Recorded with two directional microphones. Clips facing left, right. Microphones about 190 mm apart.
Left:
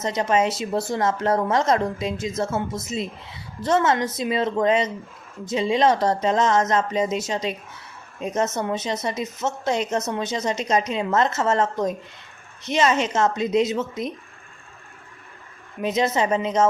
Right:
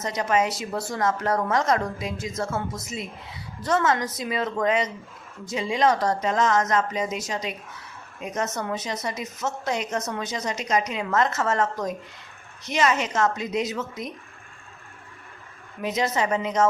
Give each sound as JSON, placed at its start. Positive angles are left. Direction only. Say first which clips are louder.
{"t": 0.0, "sound": "a woman's voice", "louder": "left 3 dB", "side_deg": 25}
{"t": 15.8, "sound": "a woman's voice", "louder": "left 3 dB", "side_deg": 25}